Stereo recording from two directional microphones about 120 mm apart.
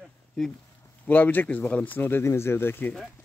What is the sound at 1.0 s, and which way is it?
Speech, 15° left (ahead or behind).